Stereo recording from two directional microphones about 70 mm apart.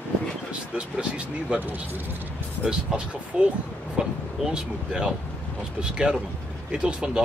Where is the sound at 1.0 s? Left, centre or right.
Centre.